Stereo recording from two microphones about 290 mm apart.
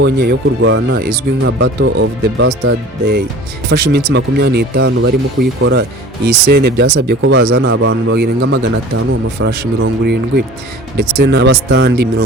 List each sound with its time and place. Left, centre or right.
0.0 s speech: right